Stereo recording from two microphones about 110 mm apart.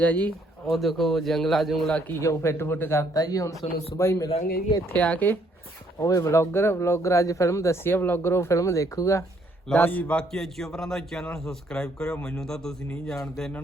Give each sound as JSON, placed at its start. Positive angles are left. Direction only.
{"t": 0.0, "sound": "speech", "side_deg": 15}
{"t": 0.7, "sound": "a man's voice", "side_deg": 0}
{"t": 2.1, "sound": "speech", "side_deg": 25}
{"t": 4.9, "sound": "speech", "side_deg": 15}
{"t": 6.0, "sound": "speech", "side_deg": 30}
{"t": 9.6, "sound": "a man's voice", "side_deg": 15}